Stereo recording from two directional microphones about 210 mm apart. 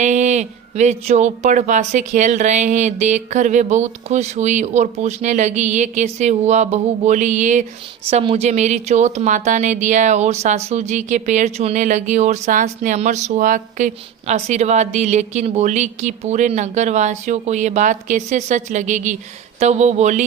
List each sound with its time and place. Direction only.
0.0 s speech: 35° right (ahead or behind)